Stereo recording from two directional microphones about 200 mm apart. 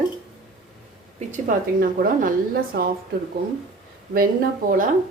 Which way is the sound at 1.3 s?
40° right (ahead or behind).